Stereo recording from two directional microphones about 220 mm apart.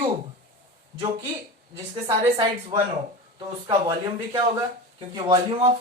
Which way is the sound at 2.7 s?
20° right (ahead or behind).